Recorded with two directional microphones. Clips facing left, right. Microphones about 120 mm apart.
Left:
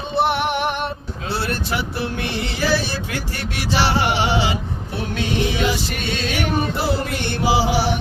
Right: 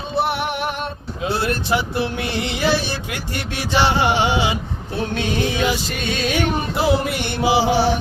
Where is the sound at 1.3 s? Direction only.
30° left (ahead or behind).